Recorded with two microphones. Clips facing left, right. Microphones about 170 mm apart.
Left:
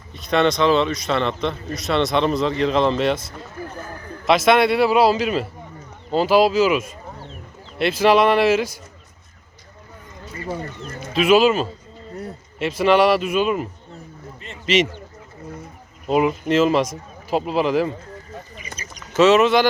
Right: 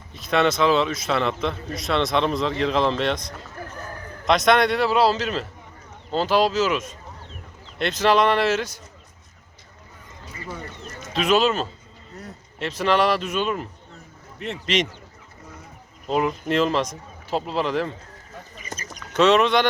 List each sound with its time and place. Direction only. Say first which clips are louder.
0.1 s a man's voice: left 2 dB; centre (ahead or behind)
11.1 s speech: left 5 dB; 10° left (ahead or behind)
14.3 s speech: right 8 dB; 75° right (ahead or behind)
16.0 s speech: left 4 dB; 10° left (ahead or behind)
18.8 s a sound: even; 45° right (ahead or behind)
19.1 s a man's voice: left 3 dB; 5° left (ahead or behind)